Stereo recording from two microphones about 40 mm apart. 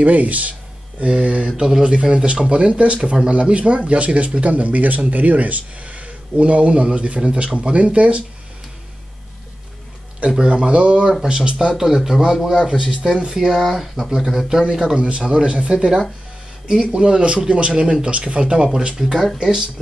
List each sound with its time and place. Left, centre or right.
0.0 s speech: right; by 2.2 s centre
2.5 s speech: right
10.5 s speech: right
11.7 s speech: centre
13.5 s speech: centre
15.0 s speech: right
18.9 s speech: centre